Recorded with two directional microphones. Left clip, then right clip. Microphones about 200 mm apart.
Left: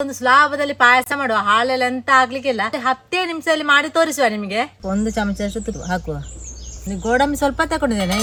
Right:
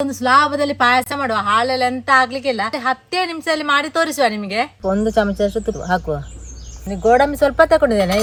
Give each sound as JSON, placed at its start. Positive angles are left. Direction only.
{"t": 0.0, "sound": "a woman's voice", "side_deg": 5}
{"t": 4.8, "sound": "speech", "side_deg": -30}